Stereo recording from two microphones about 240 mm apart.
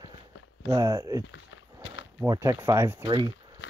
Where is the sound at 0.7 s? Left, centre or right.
Centre.